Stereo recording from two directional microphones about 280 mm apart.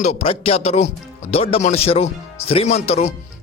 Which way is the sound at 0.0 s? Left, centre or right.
Left.